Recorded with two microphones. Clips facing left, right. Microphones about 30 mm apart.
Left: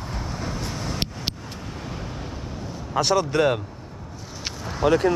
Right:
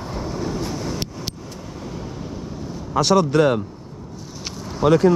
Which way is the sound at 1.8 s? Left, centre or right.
Left.